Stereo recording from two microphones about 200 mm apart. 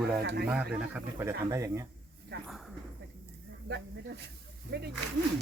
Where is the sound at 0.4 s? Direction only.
5° right (ahead or behind).